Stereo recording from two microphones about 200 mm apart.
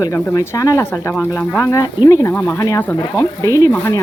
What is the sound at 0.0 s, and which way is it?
Speech, 15° left (ahead or behind).